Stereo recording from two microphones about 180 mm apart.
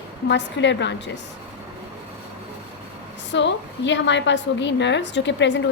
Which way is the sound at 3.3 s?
85° left.